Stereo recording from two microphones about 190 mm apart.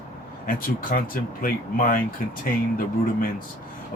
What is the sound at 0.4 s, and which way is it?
Speech, 45° left (ahead or behind).